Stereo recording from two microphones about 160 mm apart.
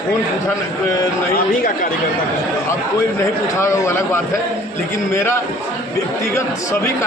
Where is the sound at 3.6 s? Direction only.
15° left (ahead or behind).